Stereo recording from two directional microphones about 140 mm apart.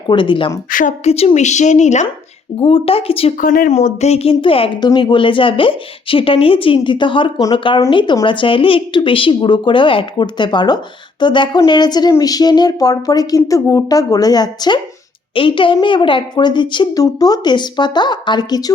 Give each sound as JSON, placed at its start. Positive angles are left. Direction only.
{"t": 0.1, "sound": "a woman's voice", "side_deg": 35}
{"t": 0.7, "sound": "speech", "side_deg": 75}
{"t": 1.0, "sound": "a woman's voice", "side_deg": 50}
{"t": 2.6, "sound": "speech", "side_deg": 40}
{"t": 3.3, "sound": "speech", "side_deg": 75}
{"t": 3.8, "sound": "a woman's voice", "side_deg": 50}